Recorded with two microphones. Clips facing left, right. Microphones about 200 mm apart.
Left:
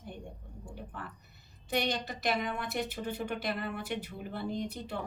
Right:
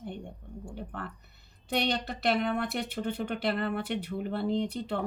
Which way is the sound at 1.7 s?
65° right (ahead or behind).